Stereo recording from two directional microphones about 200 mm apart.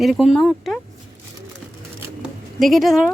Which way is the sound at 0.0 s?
Centre (ahead or behind).